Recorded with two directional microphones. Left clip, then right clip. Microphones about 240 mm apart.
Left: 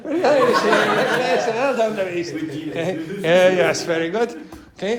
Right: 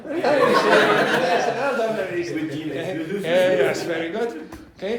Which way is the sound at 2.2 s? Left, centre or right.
Centre.